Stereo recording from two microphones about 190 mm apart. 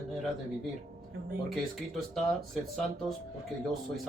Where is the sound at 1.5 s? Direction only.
Centre (ahead or behind).